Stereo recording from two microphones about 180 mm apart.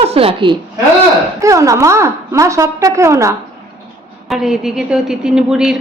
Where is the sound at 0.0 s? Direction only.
30° right (ahead or behind).